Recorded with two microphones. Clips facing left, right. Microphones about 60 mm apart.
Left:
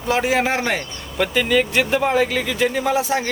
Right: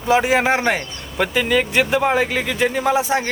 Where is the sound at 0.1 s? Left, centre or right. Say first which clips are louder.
Right 3 dB; centre.